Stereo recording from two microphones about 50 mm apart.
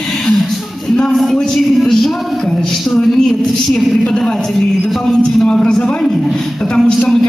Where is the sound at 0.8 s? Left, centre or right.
Centre.